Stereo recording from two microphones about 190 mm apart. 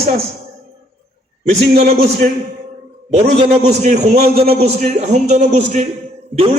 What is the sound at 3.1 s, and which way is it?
A man's voice, 35° right (ahead or behind).